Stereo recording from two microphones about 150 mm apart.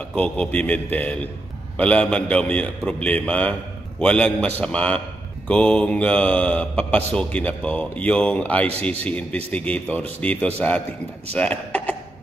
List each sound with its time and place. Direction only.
0.1 s a man's voice: 10° left (ahead or behind)